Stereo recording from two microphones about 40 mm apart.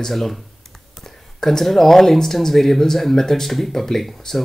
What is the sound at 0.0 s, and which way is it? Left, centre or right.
Speech, centre.